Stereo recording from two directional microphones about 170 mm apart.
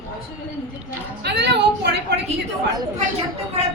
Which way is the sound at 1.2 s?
85° right.